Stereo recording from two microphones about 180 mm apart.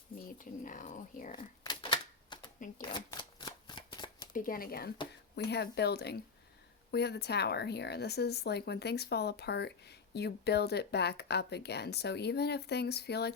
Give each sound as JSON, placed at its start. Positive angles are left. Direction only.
{"t": 0.3, "sound": "speech", "side_deg": 45}
{"t": 1.4, "sound": "typewriter", "side_deg": 30}
{"t": 2.9, "sound": "shuffling cards", "side_deg": 25}
{"t": 4.4, "sound": "speech", "side_deg": 50}
{"t": 5.4, "sound": "speech", "side_deg": 65}